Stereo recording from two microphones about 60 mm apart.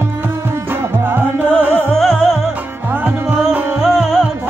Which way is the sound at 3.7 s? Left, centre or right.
Centre.